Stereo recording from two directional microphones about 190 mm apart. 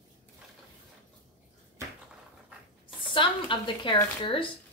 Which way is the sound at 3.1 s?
25° left (ahead or behind).